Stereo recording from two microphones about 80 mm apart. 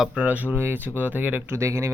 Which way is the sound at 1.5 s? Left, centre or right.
Right.